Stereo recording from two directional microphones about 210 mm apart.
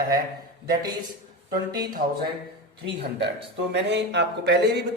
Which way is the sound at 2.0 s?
50° right (ahead or behind).